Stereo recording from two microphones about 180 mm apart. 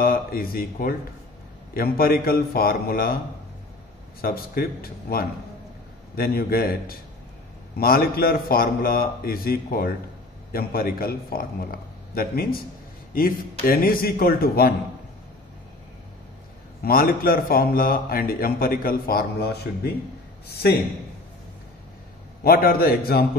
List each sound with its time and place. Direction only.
0.0 s a man's voice: 55° left (ahead or behind)
4.2 s a man's voice: 55° left (ahead or behind)
16.8 s a man's voice: 55° left (ahead or behind)
22.4 s a man's voice: 55° left (ahead or behind)